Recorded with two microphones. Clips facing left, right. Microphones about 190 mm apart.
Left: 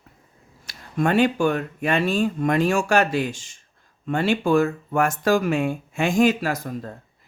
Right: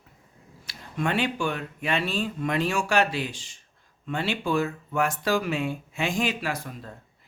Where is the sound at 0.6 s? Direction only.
45° left (ahead or behind).